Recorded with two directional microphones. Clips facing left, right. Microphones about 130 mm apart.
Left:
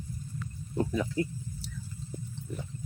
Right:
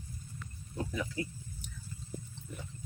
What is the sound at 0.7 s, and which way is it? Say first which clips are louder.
Snake: left 7 dB; 35° left (ahead or behind).